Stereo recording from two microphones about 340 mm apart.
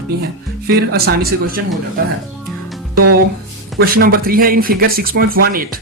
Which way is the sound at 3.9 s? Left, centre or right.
Right.